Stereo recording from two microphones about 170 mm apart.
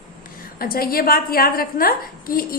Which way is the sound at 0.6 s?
60° left (ahead or behind).